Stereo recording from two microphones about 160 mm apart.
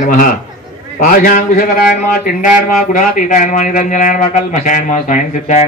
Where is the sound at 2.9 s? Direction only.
55° left (ahead or behind).